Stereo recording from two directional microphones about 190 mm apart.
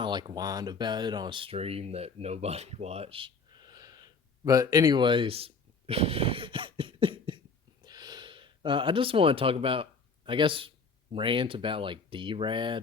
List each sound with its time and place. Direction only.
0.0 s speech: 25° right (ahead or behind)
7.9 s a sound: 20° right (ahead or behind)
11.1 s speech: 25° right (ahead or behind)